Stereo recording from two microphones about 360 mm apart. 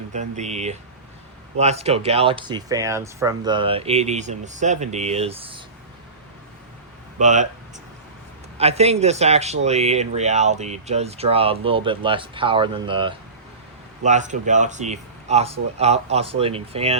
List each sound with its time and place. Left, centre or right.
0.1 s speech: centre
7.2 s speech: centre
8.5 s speech: centre